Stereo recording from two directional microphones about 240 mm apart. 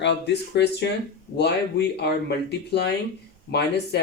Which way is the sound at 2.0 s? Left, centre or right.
Left.